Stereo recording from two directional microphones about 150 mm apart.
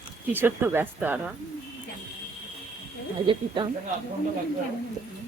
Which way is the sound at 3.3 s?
35° right (ahead or behind).